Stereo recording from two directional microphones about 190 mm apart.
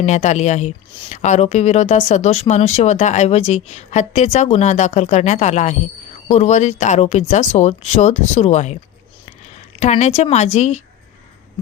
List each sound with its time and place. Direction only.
0.0 s speech: 35° left (ahead or behind)
9.8 s speech: 35° left (ahead or behind)